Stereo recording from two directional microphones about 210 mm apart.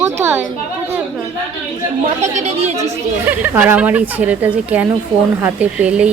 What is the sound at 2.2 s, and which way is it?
Speech, 30° right (ahead or behind).